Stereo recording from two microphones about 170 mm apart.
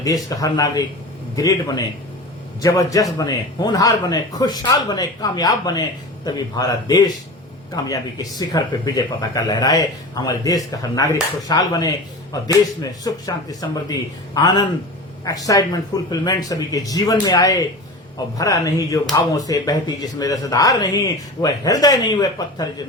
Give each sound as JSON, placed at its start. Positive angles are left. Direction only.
{"t": 0.0, "sound": "speech", "side_deg": 20}